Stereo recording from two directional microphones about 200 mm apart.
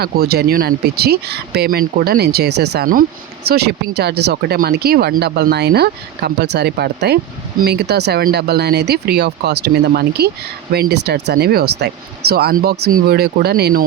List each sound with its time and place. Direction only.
0.0 s speech: 50° right (ahead or behind)